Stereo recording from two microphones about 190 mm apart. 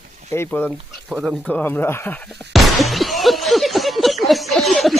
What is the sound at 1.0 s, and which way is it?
Speech, centre (ahead or behind).